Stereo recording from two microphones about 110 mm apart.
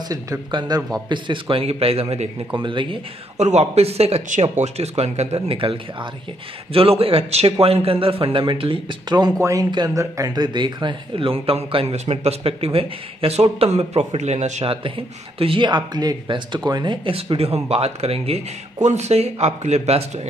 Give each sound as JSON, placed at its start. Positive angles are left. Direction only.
{"t": 0.5, "sound": "speech", "side_deg": -40}
{"t": 2.5, "sound": "speech", "side_deg": -50}
{"t": 3.3, "sound": "speech", "side_deg": -90}
{"t": 9.1, "sound": "speech", "side_deg": -35}
{"t": 17.1, "sound": "speech", "side_deg": -65}